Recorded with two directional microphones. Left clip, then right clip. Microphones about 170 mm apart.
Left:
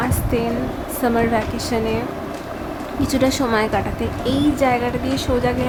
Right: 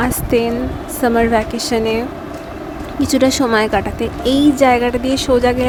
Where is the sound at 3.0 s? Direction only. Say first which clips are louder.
Right 5 dB; 35° right (ahead or behind).